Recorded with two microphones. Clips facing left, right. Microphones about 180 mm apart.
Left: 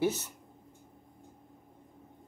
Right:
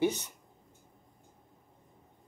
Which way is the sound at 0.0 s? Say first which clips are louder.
Right 1 dB; 5° left (ahead or behind).